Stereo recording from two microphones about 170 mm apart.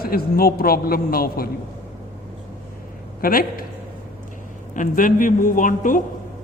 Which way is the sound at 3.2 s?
55° left (ahead or behind).